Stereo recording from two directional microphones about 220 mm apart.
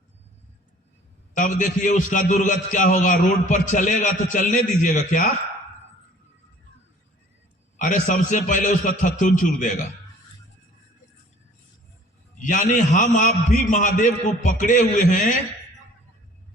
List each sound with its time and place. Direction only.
1.4 s a man's voice: 35° left (ahead or behind)
7.8 s a man's voice: 35° left (ahead or behind)
12.4 s a man's voice: 35° left (ahead or behind)